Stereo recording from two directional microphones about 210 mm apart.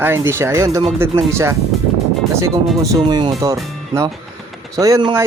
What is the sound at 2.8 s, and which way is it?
Speech, 20° right (ahead or behind).